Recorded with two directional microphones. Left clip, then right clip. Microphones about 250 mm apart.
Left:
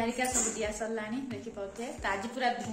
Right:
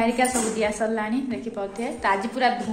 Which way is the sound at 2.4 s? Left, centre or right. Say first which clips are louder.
Right 8 dB; centre.